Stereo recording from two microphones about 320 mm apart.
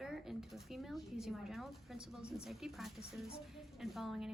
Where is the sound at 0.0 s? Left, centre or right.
Centre.